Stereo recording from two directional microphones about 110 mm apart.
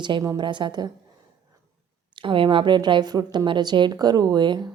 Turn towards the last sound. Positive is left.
turn(degrees=-40)  # may be behind; listen again after turning